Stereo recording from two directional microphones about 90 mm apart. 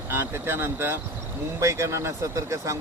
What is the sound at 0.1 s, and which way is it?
Speech, 25° right (ahead or behind).